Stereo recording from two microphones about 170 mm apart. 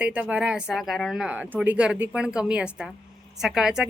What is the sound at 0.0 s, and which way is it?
Speech, 10° right (ahead or behind).